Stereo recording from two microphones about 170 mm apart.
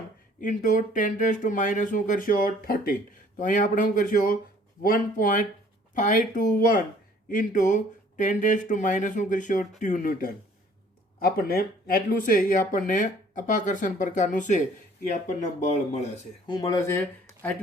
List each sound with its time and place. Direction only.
0.4 s speech: 50° left (ahead or behind)
15.6 s speech: 40° left (ahead or behind)
16.5 s speech: 20° left (ahead or behind)